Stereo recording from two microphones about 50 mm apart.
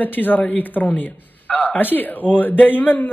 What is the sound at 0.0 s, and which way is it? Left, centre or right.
Speech, left.